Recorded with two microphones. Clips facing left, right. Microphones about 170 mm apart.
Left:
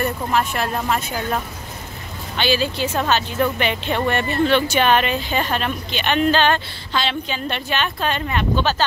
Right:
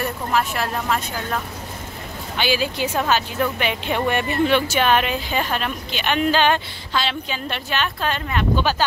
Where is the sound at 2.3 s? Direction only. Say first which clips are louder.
Left 2 dB; 10° right (ahead or behind).